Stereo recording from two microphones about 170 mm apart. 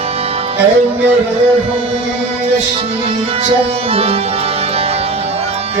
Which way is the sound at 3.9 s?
35° right (ahead or behind).